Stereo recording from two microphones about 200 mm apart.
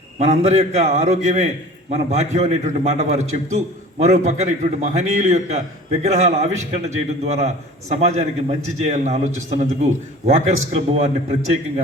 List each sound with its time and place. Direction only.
0.2 s a man's voice: 30° right (ahead or behind)